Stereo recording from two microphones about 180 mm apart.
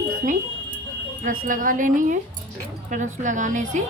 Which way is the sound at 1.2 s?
50° right (ahead or behind).